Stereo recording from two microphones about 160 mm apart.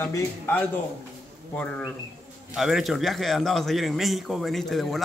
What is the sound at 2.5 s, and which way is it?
A man's voice, centre (ahead or behind).